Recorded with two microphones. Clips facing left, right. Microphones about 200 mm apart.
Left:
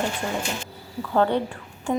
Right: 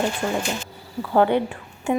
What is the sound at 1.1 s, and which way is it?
Speech, 15° right (ahead or behind).